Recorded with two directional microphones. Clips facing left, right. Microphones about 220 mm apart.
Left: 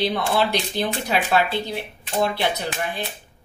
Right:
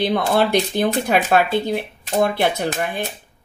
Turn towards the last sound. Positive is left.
turn(degrees=-45)  # may be behind; listen again after turning